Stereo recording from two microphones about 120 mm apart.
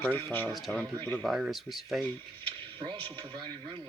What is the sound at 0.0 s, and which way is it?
Speech, 15° left (ahead or behind).